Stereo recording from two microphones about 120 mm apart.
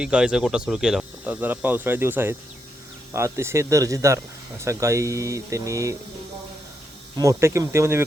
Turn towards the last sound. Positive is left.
turn(degrees=-25)  # may be behind; listen again after turning